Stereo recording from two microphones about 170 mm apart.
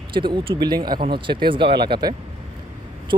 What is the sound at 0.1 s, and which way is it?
Speech, 30° right (ahead or behind).